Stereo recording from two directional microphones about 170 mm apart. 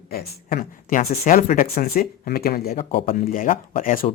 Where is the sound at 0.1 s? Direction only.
60° left (ahead or behind).